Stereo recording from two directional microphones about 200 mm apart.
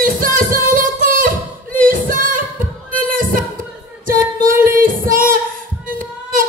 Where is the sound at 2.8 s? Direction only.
45° right (ahead or behind).